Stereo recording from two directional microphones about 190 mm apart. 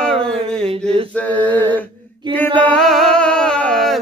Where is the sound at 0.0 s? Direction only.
5° left (ahead or behind).